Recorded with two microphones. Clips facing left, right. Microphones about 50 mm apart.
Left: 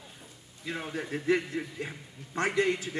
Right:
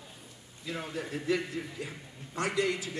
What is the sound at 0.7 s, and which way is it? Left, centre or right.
A man's voice, left.